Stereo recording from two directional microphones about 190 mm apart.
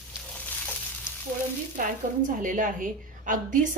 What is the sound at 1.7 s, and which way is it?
A woman's voice, 45° right (ahead or behind).